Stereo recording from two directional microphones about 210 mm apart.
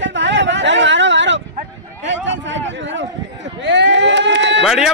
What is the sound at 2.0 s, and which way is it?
Speech, 60° right (ahead or behind).